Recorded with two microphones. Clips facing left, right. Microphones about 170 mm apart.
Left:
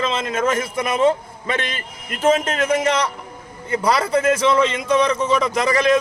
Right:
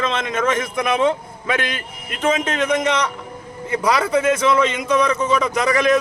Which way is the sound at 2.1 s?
40° left (ahead or behind).